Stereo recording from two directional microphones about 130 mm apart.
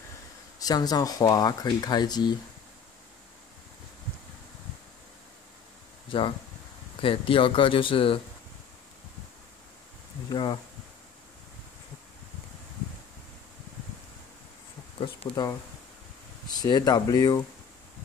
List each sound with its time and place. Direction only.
0.6 s speech: 30° left (ahead or behind)
6.1 s speech: 40° left (ahead or behind)
10.3 s speech: 35° left (ahead or behind)
15.0 s speech: 30° left (ahead or behind)